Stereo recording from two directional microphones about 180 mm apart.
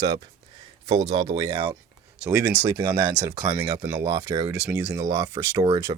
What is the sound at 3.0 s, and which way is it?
Speech, 25° right (ahead or behind).